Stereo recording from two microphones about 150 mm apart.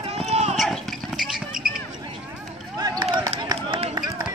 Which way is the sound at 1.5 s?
75° right (ahead or behind).